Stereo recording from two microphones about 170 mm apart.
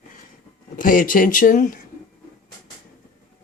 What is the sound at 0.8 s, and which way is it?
Speech, 55° left (ahead or behind).